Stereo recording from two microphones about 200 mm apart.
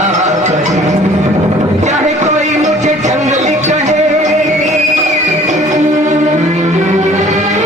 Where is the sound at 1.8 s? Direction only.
35° right (ahead or behind).